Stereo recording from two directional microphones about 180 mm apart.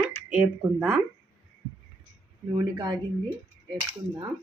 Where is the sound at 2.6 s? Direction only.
20° right (ahead or behind).